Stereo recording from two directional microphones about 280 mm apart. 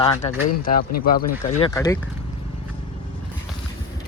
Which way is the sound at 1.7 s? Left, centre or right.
Centre.